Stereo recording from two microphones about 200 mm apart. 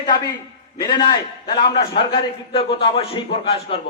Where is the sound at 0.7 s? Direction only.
20° left (ahead or behind).